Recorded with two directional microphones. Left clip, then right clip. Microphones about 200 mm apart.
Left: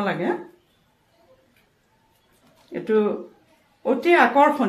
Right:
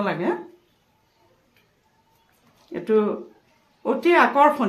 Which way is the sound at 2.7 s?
20° right (ahead or behind).